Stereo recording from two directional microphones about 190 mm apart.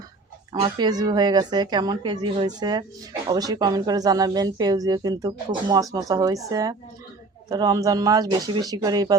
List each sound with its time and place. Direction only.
0.6 s a woman's voice: 20° right (ahead or behind)